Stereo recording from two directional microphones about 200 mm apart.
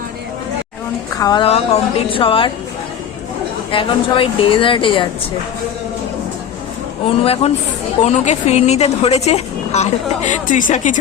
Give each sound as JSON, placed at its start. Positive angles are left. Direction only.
{"t": 1.2, "sound": "a woman's voice", "side_deg": 20}
{"t": 3.7, "sound": "a woman's voice", "side_deg": 25}
{"t": 7.1, "sound": "a woman's voice", "side_deg": 30}